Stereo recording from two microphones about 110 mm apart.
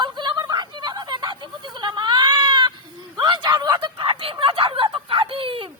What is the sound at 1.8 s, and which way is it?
Baby cry, 40° right (ahead or behind).